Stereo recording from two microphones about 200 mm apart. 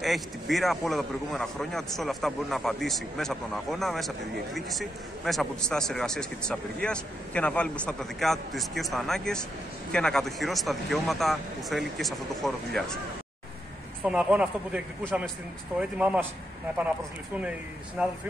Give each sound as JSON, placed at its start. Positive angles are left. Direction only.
{"t": 0.0, "sound": "speech", "side_deg": 0}
{"t": 14.0, "sound": "speech", "side_deg": -5}
{"t": 17.4, "sound": "speech", "side_deg": -5}